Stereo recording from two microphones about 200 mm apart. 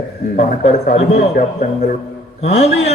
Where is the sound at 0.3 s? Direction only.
35° left (ahead or behind).